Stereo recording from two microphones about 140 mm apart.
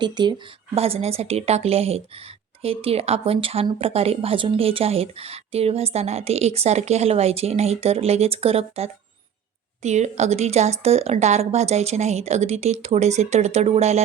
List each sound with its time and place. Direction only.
0.0 s speech: 30° right (ahead or behind)
0.8 s speech: 45° right (ahead or behind)